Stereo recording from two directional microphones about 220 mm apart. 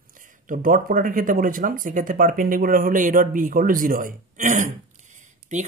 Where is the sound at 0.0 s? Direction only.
35° right (ahead or behind).